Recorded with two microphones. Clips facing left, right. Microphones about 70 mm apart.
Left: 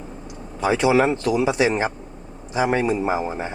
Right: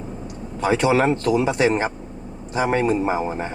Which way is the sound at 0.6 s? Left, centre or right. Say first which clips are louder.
Even; right.